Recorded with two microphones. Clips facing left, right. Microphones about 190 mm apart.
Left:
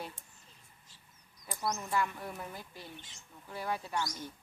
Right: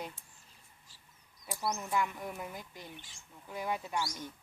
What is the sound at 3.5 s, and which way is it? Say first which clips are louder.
Speech: right 1 dB; 15° right (ahead or behind).